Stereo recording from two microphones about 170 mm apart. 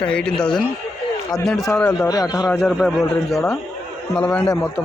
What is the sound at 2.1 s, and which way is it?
Speech, 20° left (ahead or behind).